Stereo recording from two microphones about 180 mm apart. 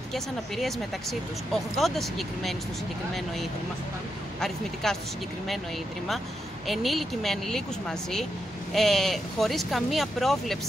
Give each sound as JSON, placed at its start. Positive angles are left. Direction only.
{"t": 0.1, "sound": "speech", "side_deg": 0}
{"t": 4.8, "sound": "speech", "side_deg": 5}
{"t": 6.7, "sound": "speech", "side_deg": 0}
{"t": 8.7, "sound": "speech", "side_deg": 0}